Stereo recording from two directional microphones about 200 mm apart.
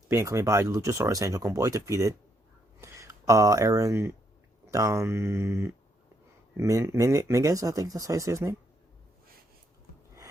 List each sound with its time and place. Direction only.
0.1 s speech: 15° right (ahead or behind)